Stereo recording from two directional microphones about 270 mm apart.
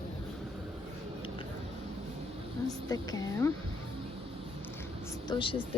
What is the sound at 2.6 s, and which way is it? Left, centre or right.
Speech, centre.